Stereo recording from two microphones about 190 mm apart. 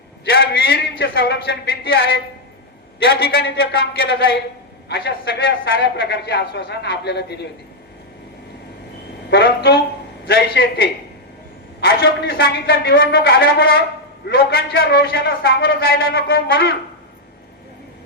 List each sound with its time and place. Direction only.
0.3 s a man's voice: 55° left (ahead or behind)
9.3 s a man's voice: 60° left (ahead or behind)
11.9 s a man's voice: 55° left (ahead or behind)
14.7 s a man's voice: 85° left
15.1 s a man's voice: 55° left (ahead or behind)